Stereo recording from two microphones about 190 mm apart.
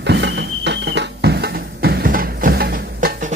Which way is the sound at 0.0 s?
65° right (ahead or behind).